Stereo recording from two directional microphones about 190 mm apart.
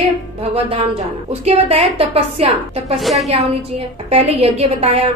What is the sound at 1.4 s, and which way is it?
A woman's voice, 35° right (ahead or behind).